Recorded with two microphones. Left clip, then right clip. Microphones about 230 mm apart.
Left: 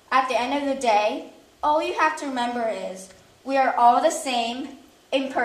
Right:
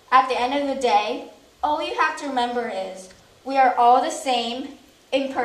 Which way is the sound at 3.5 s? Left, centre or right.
Left.